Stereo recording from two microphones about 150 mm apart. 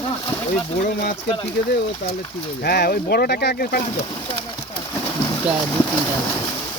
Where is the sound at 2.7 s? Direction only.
90° left.